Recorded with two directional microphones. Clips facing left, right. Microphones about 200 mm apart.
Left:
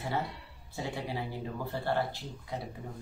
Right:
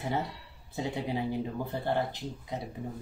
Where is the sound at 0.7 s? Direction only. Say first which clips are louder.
Right 4 dB; 20° right (ahead or behind).